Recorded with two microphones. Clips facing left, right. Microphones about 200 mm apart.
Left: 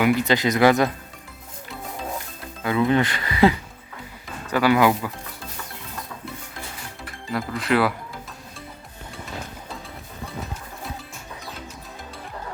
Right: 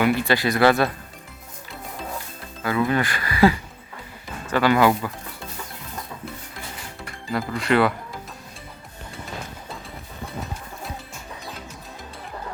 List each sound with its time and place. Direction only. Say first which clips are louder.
0.0 s speech: left 1 dB; 20° left (ahead or behind)
2.6 s speech: left 2 dB; 20° left (ahead or behind)
4.5 s speech: even; 10° left (ahead or behind)
7.0 s speech: right 1 dB; centre (ahead or behind)